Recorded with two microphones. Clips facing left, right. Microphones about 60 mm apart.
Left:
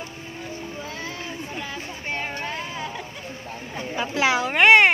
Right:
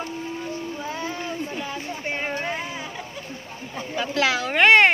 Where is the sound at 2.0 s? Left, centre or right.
Centre.